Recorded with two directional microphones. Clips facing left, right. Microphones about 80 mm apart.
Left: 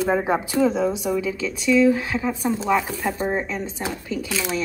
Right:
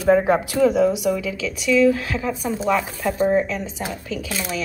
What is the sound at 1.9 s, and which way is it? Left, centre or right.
A woman's voice, centre.